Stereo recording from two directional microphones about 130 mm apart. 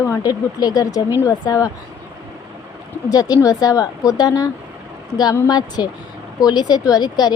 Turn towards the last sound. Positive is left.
turn(degrees=30)  # may be behind; listen again after turning